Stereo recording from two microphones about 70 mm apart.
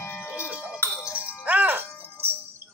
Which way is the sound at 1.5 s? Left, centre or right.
Right.